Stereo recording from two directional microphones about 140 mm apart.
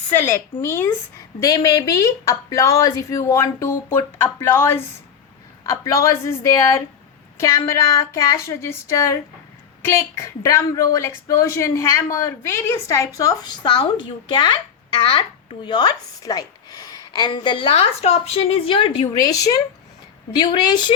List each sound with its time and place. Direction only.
0.1 s a woman's voice: 15° left (ahead or behind); by 19.0 s 35° left (ahead or behind)
19.0 s a woman's voice: 25° left (ahead or behind)